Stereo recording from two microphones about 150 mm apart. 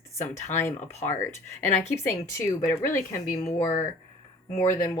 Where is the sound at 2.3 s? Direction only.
20° left (ahead or behind).